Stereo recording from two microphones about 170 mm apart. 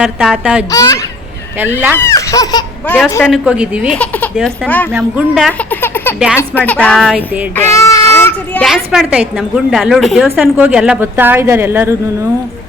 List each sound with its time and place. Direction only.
0.0 s a woman's voice: 5° right (ahead or behind)
0.7 s speech: 20° left (ahead or behind)
2.0 s speech: 20° left (ahead or behind)
2.8 s speech: 10° left (ahead or behind)
3.2 s a woman's voice: 5° right (ahead or behind)
3.9 s speech: 5° left (ahead or behind)
4.9 s a woman's voice: 5° right (ahead or behind)
5.8 s speech: 10° left (ahead or behind)
7.5 s a sound: 15° left (ahead or behind)
8.6 s a woman's voice: centre (ahead or behind)